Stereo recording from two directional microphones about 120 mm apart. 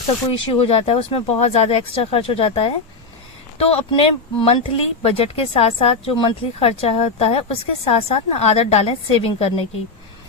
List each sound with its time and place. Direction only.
0.6 s speech: 50° left (ahead or behind)